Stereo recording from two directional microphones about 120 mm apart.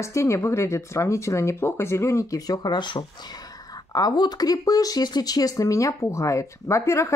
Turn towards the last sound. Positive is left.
turn(degrees=25)  # may be behind; listen again after turning